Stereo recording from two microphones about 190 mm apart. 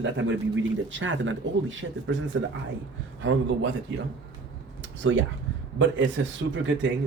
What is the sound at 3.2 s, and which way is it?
Speech, 80° right.